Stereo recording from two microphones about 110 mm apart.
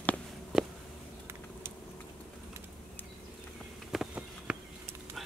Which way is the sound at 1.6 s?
25° right (ahead or behind).